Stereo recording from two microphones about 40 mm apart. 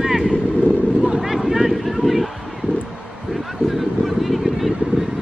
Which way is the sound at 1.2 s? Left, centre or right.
Centre.